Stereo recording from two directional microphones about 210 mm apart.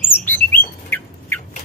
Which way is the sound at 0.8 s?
10° left (ahead or behind).